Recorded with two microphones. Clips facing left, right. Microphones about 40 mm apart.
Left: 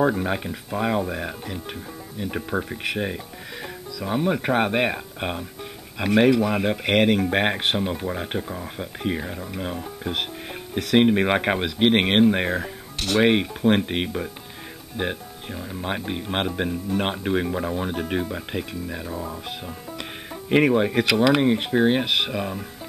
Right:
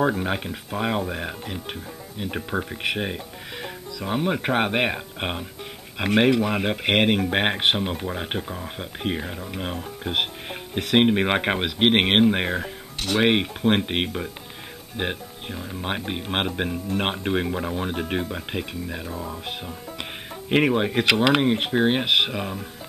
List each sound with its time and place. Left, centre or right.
0.0 s speech: centre
13.3 s speech: right
15.5 s speech: centre
15.8 s speech: right
19.0 s speech: centre
20.4 s speech: centre
21.0 s speech: right